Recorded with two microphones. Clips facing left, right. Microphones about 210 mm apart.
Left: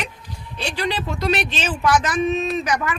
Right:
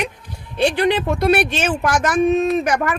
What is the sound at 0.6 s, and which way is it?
Speech, 55° right (ahead or behind).